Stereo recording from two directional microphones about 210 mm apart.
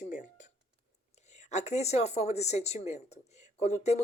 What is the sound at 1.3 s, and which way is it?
Speech, 35° left (ahead or behind).